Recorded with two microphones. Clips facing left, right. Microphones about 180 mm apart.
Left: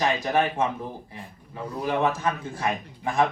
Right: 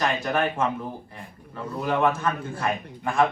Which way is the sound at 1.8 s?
60° right (ahead or behind).